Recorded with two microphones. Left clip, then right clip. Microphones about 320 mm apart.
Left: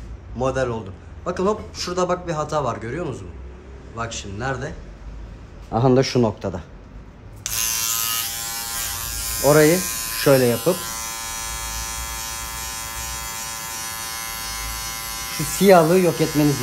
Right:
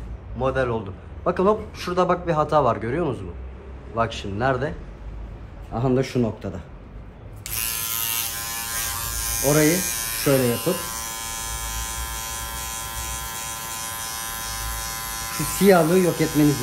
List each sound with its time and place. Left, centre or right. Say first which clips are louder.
0.4 s a man's voice: even; centre
5.7 s a man's voice: left 5 dB; left
7.6 s electric shaver: left 5 dB; centre
15.9 s a man's voice: left 2 dB; centre